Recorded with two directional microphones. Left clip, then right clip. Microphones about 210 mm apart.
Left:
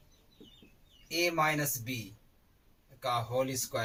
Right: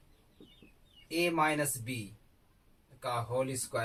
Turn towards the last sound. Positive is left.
turn(degrees=-15)  # may be behind; listen again after turning